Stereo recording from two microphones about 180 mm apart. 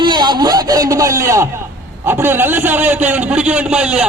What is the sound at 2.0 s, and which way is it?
A man's voice, 10° right (ahead or behind).